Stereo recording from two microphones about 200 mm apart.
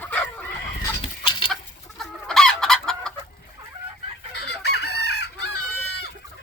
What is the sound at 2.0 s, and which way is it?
Chicken, centre (ahead or behind).